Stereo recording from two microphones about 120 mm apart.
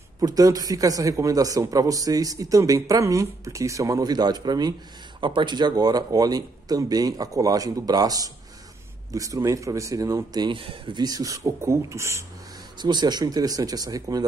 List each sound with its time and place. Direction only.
0.2 s speech: 30° right (ahead or behind)
10.3 s speech: 40° right (ahead or behind); by 12.3 s 25° right (ahead or behind)
12.7 s speech: 35° right (ahead or behind)